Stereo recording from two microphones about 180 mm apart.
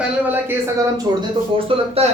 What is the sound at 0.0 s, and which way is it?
Speech, 10° right (ahead or behind).